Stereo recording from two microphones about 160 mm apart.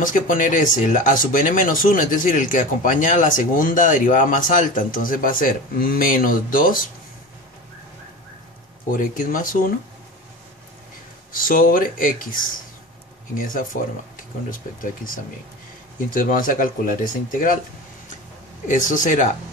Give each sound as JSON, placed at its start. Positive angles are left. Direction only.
{"t": 0.0, "sound": "speech", "side_deg": 55}
{"t": 8.9, "sound": "speech", "side_deg": 55}
{"t": 11.4, "sound": "speech", "side_deg": 60}
{"t": 18.7, "sound": "speech", "side_deg": 55}